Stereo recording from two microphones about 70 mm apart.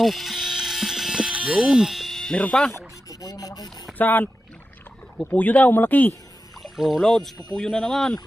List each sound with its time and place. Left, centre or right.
0.0 s music: centre
1.3 s a sound: centre
1.6 s speech: centre
2.4 s speech: centre
3.1 s rub: left
3.9 s speech: left
5.3 s speech: left
6.6 s rowboat: centre
7.0 s speech: centre